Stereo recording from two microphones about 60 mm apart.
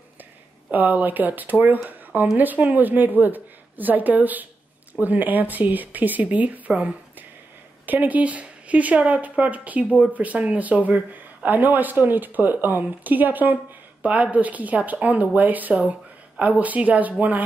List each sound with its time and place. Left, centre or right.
0.7 s speech: right